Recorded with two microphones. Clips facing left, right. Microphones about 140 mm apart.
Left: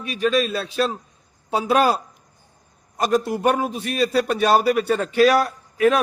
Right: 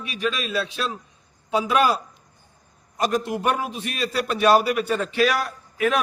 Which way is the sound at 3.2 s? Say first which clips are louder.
Left 4 dB; 40° left (ahead or behind).